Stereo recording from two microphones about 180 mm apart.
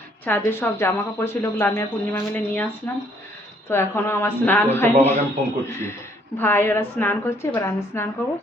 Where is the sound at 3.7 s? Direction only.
15° left (ahead or behind).